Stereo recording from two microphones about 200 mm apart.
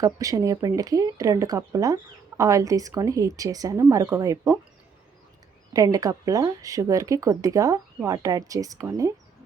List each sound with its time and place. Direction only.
0.0 s speech: 15° right (ahead or behind)
5.7 s speech: 15° right (ahead or behind)